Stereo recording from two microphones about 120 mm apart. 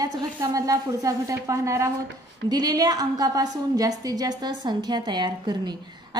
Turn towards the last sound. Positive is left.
turn(degrees=-35)  # may be behind; listen again after turning